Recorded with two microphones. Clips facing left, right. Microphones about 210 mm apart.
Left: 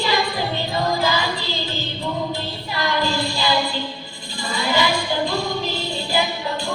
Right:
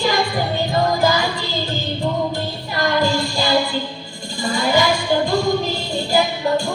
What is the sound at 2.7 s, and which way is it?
Music, 45° right (ahead or behind).